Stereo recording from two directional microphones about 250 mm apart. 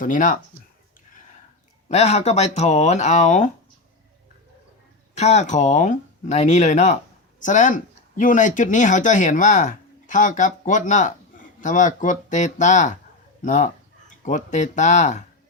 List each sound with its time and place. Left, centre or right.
0.0 s speech: left
1.9 s speech: left
5.1 s speech: left